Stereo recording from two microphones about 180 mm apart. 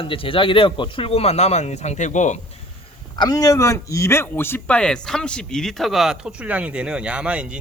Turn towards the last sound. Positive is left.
turn(degrees=-5)  # may be behind; listen again after turning